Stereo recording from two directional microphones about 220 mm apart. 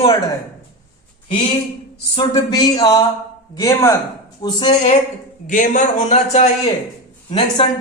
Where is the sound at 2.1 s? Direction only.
20° left (ahead or behind).